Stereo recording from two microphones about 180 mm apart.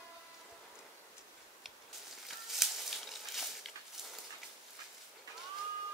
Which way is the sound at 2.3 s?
Centre (ahead or behind).